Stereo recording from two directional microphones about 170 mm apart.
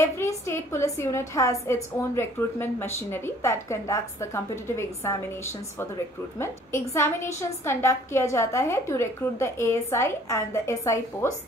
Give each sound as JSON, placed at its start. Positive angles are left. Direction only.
{"t": 0.0, "sound": "a woman's voice", "side_deg": 15}
{"t": 6.3, "sound": "a woman's voice", "side_deg": 15}